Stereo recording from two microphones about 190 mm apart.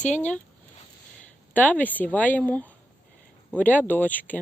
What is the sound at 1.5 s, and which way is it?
Speech, 10° left (ahead or behind).